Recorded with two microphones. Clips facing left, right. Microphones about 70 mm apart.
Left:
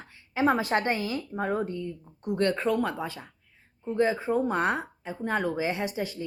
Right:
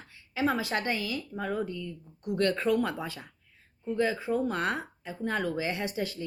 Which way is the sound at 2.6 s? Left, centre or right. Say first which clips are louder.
Left 1 dB; centre.